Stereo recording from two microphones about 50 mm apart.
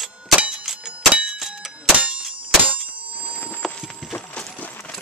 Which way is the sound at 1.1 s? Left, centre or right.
Right.